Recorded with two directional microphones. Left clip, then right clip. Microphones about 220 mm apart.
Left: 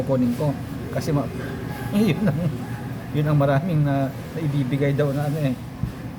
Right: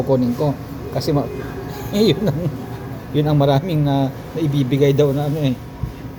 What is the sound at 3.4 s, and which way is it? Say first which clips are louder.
Speech: right 2 dB; 10° right (ahead or behind).